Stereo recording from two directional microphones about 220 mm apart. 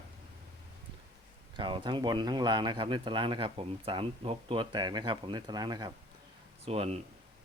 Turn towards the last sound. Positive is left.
turn(degrees=-25)  # may be behind; listen again after turning